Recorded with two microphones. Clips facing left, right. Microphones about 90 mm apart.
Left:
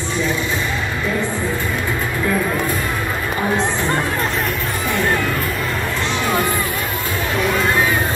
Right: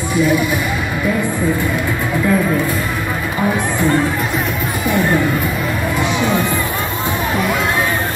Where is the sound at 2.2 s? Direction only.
Centre (ahead or behind).